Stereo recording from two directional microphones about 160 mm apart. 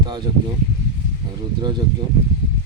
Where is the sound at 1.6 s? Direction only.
25° right (ahead or behind).